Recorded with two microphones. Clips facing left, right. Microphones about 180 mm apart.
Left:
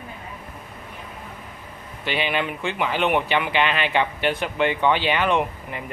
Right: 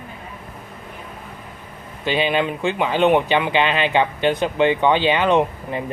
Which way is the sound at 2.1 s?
20° right (ahead or behind).